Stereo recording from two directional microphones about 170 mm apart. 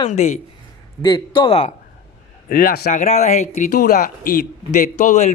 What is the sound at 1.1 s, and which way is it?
Speech, 30° left (ahead or behind).